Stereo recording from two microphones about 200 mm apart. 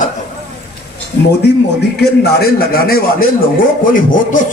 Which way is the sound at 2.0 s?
50° left (ahead or behind).